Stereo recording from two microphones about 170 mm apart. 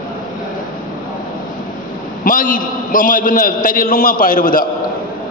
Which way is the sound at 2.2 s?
55° left (ahead or behind).